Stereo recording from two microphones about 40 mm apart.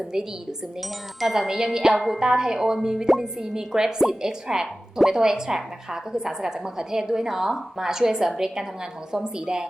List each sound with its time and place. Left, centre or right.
0.8 s chime: centre
2.1 s a woman's voice: centre